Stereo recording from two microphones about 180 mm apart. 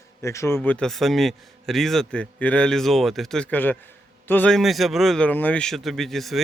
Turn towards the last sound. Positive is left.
turn(degrees=0)  # may be behind; listen again after turning